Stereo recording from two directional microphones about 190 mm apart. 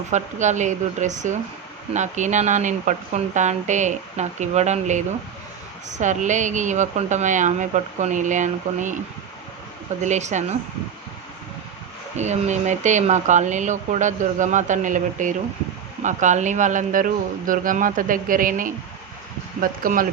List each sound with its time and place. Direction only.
0.1 s speech: 40° right (ahead or behind)
10.0 s speech: 40° right (ahead or behind)
12.1 s speech: 35° right (ahead or behind)